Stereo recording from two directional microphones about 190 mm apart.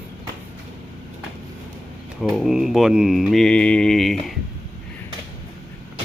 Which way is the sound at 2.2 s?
Centre (ahead or behind).